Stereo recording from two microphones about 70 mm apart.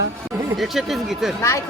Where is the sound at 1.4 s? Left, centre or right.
Left.